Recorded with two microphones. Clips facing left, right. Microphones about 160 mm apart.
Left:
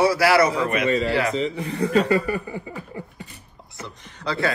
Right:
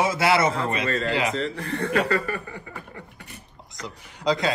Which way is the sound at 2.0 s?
20° left (ahead or behind).